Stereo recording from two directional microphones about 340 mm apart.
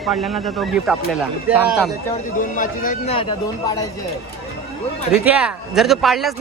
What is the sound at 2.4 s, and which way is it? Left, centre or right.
A man's voice, left.